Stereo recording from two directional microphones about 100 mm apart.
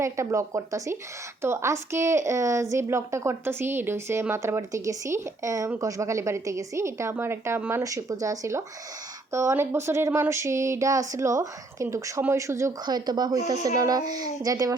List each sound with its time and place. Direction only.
0.0 s a woman's voice: 30° right (ahead or behind)
12.8 s a woman's voice: 45° right (ahead or behind)